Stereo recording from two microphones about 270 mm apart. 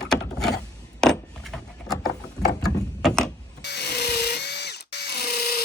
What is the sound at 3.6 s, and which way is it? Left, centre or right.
Drill, left.